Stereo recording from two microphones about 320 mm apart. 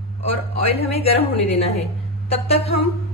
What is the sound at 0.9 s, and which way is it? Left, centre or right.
A woman's voice, centre.